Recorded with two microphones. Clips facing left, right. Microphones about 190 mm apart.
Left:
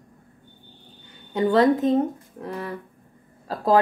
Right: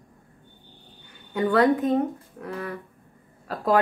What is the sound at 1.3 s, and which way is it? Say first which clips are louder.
Speech: left 2 dB; 20° left (ahead or behind).